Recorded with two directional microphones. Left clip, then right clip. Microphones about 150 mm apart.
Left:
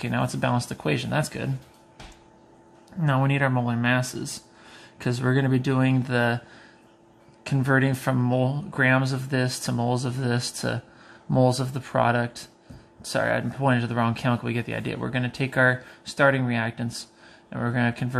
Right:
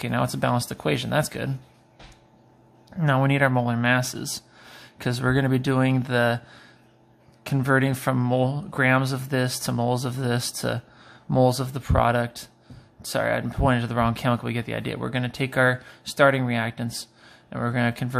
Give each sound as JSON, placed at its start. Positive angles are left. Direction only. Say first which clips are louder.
{"t": 0.0, "sound": "speech", "louder": "right 2 dB", "side_deg": -30}
{"t": 3.0, "sound": "speech", "louder": "right 3 dB", "side_deg": -30}